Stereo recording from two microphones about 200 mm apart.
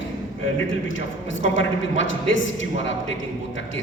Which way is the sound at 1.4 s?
70° left (ahead or behind).